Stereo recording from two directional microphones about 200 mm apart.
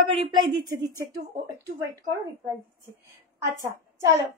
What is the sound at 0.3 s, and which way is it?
Speech, 20° right (ahead or behind).